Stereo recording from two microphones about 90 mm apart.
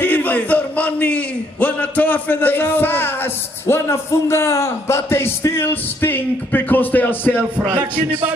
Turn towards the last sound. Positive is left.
turn(degrees=20)  # may be behind; listen again after turning